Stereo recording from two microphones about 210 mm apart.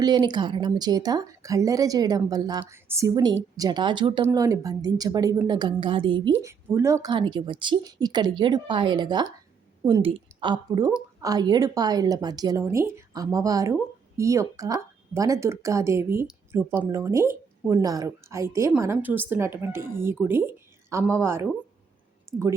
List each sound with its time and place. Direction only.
0.0 s a woman's voice: 20° right (ahead or behind)
6.4 s a woman's voice: 10° right (ahead or behind)
22.3 s a sound: 15° right (ahead or behind)